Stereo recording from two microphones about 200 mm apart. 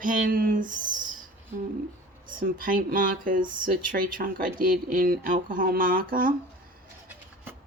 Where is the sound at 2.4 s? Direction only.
45° right (ahead or behind).